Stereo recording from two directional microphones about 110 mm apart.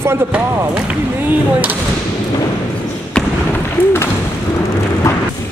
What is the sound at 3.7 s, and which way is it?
Thump, 20° left (ahead or behind).